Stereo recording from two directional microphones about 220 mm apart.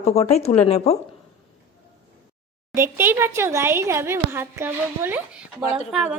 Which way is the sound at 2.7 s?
10° right (ahead or behind).